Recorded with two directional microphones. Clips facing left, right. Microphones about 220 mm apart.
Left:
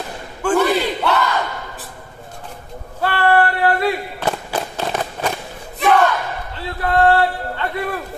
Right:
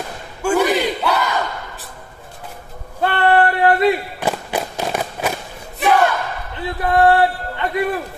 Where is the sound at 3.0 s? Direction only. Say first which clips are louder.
Right 1 dB; 20° right (ahead or behind).